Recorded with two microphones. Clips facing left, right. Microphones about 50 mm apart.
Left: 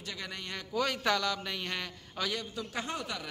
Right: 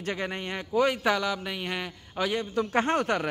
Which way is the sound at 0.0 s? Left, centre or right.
Right.